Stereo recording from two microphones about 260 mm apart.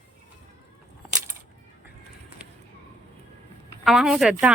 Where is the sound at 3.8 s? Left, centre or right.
Centre.